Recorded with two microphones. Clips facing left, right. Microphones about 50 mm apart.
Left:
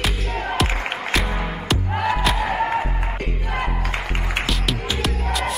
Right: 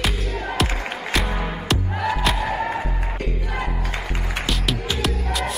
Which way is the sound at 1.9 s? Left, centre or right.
Centre.